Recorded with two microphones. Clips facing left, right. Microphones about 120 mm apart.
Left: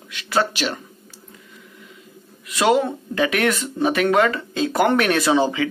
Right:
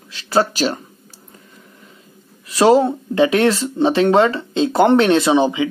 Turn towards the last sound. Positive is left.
turn(degrees=-20)  # may be behind; listen again after turning